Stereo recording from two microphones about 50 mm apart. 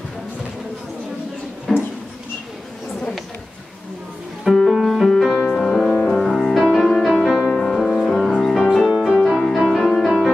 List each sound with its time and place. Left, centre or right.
1.7 s a sound: centre
4.6 s music: centre
8.8 s music: centre